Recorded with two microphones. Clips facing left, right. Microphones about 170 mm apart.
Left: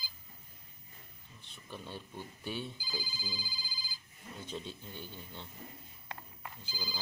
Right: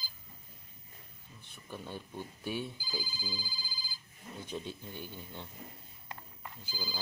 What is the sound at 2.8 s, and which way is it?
Ringtone, 45° right (ahead or behind).